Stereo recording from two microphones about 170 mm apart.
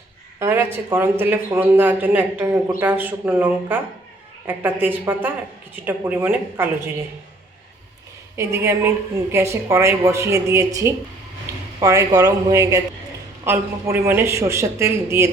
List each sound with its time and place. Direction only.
0.3 s a man's voice: 15° right (ahead or behind)
8.4 s a man's voice: 15° right (ahead or behind)